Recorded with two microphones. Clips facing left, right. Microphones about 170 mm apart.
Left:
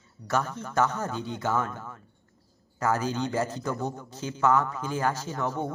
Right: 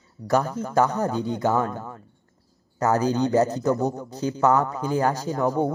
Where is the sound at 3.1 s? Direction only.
40° right (ahead or behind).